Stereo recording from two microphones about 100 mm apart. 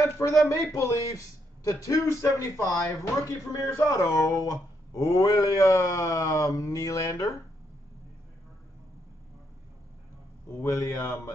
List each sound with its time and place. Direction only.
0.0 s speech: 35° left (ahead or behind)
10.6 s speech: 35° left (ahead or behind)